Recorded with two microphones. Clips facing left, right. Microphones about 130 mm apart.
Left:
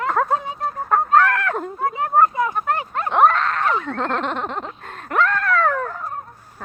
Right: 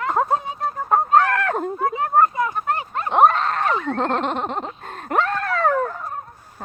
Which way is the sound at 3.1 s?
20° right (ahead or behind).